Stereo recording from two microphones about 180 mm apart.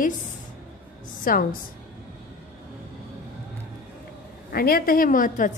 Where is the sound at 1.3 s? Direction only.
50° left (ahead or behind).